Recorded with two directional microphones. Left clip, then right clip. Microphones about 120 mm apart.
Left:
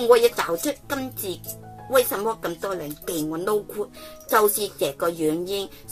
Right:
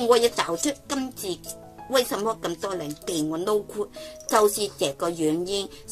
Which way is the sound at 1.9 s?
50° right (ahead or behind).